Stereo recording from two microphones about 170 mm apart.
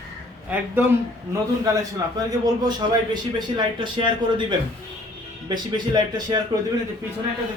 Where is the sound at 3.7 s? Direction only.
30° right (ahead or behind).